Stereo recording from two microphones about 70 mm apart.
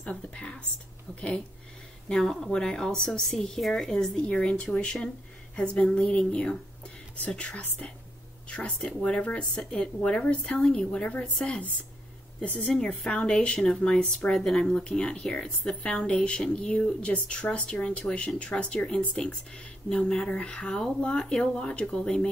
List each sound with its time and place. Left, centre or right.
0.0 s speech: centre
2.0 s speech: centre
12.6 s speech: centre